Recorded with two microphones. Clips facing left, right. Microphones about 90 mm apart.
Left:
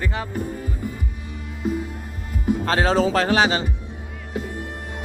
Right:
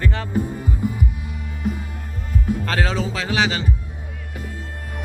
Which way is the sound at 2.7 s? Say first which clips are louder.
Left 8 dB; 30° left (ahead or behind).